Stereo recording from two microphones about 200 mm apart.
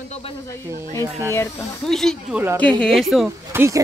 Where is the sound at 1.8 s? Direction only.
Centre (ahead or behind).